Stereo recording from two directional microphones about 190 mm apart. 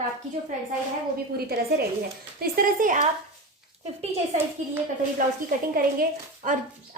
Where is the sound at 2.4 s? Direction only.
50° right (ahead or behind).